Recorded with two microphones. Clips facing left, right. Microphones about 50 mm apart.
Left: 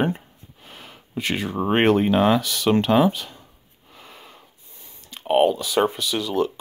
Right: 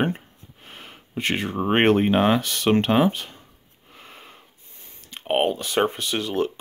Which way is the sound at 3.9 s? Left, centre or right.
Right.